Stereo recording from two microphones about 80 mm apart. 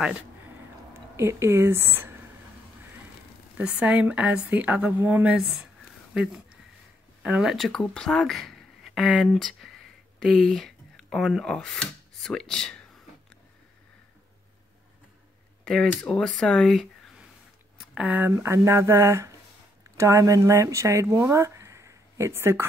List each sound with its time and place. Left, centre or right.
0.9 s speech: right
3.5 s a woman's voice: centre
5.4 s speech: centre
7.2 s speech: centre
15.6 s speech: centre
17.7 s a sound: centre
18.3 s speech: right